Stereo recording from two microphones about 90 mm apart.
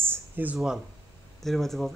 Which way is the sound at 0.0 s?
20° right (ahead or behind).